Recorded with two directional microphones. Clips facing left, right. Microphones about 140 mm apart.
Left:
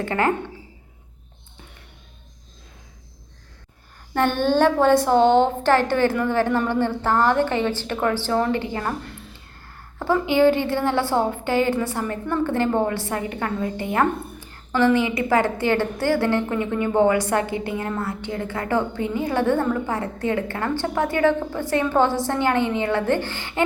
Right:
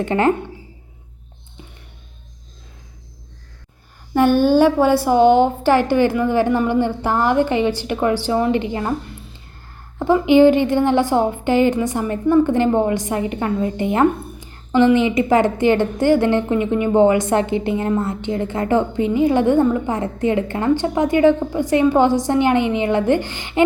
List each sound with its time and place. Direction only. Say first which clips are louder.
0.0 s a woman's voice: right 5 dB; 20° right (ahead or behind)
4.1 s a woman's voice: right 6 dB; 10° right (ahead or behind)
10.0 s a woman's voice: right 6 dB; 15° right (ahead or behind)